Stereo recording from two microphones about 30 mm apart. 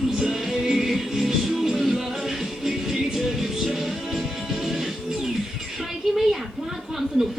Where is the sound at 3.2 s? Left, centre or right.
Centre.